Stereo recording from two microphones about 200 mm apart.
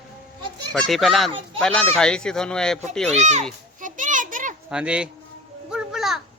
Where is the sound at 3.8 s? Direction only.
40° right (ahead or behind).